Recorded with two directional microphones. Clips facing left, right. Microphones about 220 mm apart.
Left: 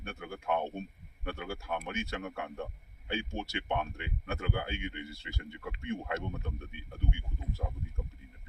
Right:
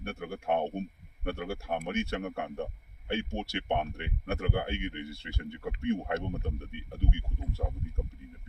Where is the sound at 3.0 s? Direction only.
60° right (ahead or behind).